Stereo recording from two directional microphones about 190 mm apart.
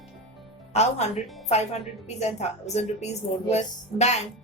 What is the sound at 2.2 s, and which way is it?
Speech, 35° left (ahead or behind).